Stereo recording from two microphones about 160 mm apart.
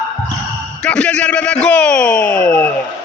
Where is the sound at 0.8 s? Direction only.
5° left (ahead or behind).